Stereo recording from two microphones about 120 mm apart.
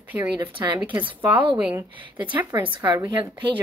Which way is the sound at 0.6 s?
25° right (ahead or behind).